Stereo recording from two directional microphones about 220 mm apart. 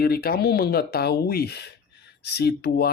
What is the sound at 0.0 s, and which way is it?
Speech, 45° left (ahead or behind).